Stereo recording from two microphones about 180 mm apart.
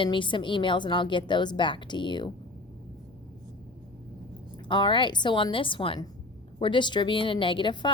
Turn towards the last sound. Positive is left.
turn(degrees=25)  # may be behind; listen again after turning